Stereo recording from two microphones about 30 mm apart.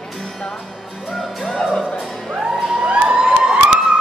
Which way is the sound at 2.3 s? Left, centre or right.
Right.